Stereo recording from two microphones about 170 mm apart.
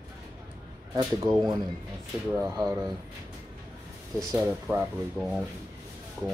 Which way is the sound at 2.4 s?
15° right (ahead or behind).